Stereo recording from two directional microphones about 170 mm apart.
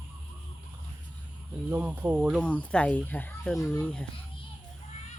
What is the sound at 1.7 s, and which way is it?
Speech, 10° right (ahead or behind).